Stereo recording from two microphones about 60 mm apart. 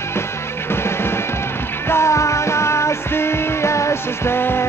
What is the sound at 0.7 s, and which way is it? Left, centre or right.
Music, left.